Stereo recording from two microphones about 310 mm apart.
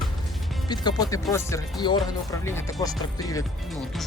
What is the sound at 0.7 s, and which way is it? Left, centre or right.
Speech, centre.